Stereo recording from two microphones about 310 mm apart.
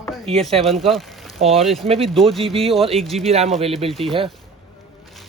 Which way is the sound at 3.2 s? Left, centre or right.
Centre.